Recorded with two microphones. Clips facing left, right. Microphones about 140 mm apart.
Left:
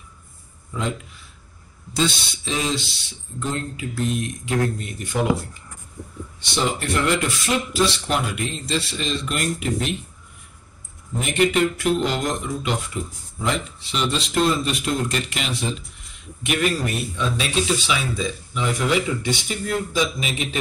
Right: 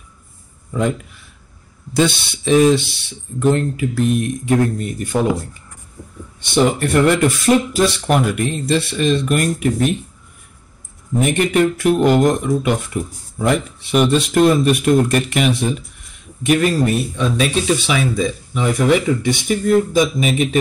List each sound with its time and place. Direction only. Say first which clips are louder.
2.0 s speech: right 7 dB; 60° right (ahead or behind); by 5.1 s 45° right (ahead or behind)
6.4 s speech: right 8 dB; 55° right (ahead or behind)
11.1 s speech: right 4 dB; 50° right (ahead or behind)
16.4 s a man's voice: right 7 dB; 40° right (ahead or behind)
17.4 s speech: right 6 dB; 55° right (ahead or behind)